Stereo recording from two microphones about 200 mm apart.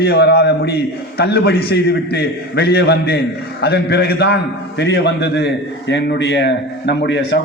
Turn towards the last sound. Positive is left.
turn(degrees=65)  # may be behind; listen again after turning